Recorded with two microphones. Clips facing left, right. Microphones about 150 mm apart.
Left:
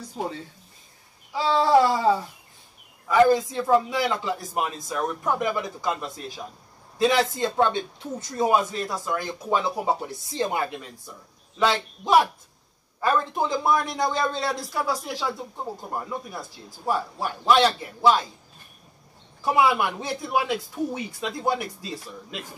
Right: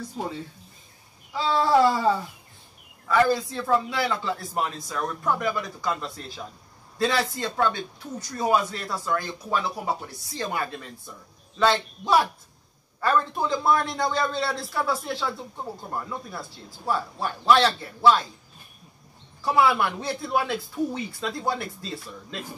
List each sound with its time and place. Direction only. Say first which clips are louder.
1.3 s a man's voice: left 2 dB; 20° left (ahead or behind)
19.4 s a man's voice: even; 15° left (ahead or behind)